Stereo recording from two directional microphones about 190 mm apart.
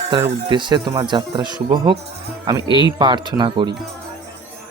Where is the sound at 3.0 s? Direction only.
25° right (ahead or behind).